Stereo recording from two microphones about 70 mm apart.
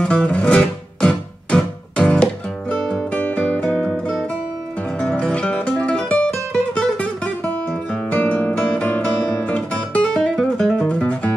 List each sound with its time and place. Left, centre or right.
0.0 s music: centre
6.5 s guitar: centre
10.8 s music: centre